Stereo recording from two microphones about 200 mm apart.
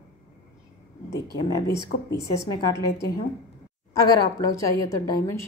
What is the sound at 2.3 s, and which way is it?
Speech, 15° left (ahead or behind).